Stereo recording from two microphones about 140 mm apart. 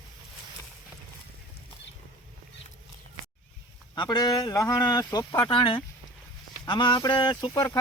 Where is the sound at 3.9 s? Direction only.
30° left (ahead or behind).